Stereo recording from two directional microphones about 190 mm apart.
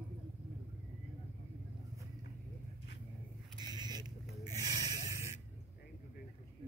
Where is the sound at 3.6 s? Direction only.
20° right (ahead or behind).